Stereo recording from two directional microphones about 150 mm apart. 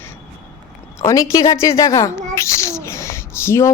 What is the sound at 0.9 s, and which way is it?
A child's voice, 20° left (ahead or behind).